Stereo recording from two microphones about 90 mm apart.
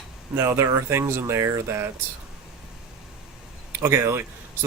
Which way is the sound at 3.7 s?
30° right (ahead or behind).